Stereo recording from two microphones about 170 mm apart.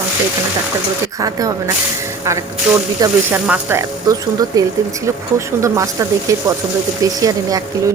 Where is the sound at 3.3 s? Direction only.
10° right (ahead or behind).